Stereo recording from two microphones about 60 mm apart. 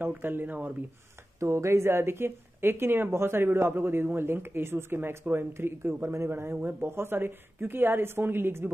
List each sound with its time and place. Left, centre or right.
0.1 s speech: right
1.4 s speech: right